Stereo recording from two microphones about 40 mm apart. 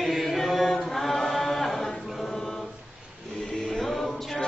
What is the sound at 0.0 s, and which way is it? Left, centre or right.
Chant, centre.